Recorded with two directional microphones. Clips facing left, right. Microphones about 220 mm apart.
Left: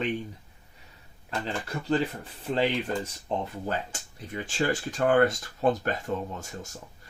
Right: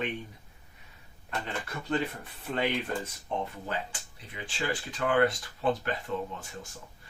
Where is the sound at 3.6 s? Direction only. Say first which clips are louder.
Left 4 dB; 45° left (ahead or behind).